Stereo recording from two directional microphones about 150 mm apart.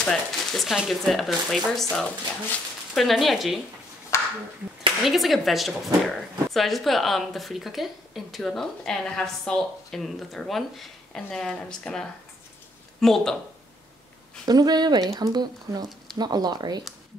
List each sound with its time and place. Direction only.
0.0 s speech: 5° left (ahead or behind)
4.1 s a sound: 20° left (ahead or behind)
5.0 s speech: centre (ahead or behind)
14.5 s speech: 25° right (ahead or behind)